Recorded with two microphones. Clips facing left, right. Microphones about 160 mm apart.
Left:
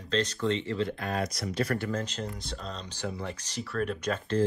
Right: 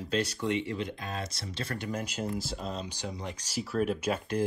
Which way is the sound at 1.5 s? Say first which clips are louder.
Left 5 dB; 25° right (ahead or behind).